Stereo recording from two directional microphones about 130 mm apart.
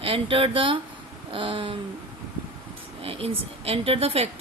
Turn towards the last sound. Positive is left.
turn(degrees=-50)  # may be behind; listen again after turning